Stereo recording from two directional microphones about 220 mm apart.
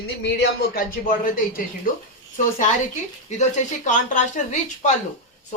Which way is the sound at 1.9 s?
40° left (ahead or behind).